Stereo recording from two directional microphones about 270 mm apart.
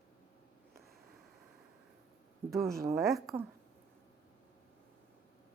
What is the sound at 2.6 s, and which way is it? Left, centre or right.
Speech, centre.